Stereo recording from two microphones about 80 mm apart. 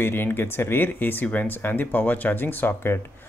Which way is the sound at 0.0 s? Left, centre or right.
Left.